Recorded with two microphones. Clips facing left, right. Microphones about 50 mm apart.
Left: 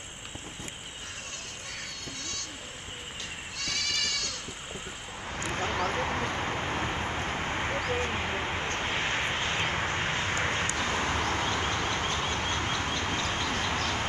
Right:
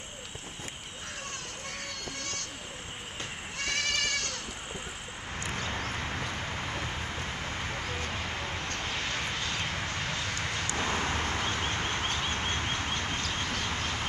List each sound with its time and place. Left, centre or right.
3.5 s goat: right
5.5 s vehicle: left
12.5 s a sound: left
13.0 s vehicle: left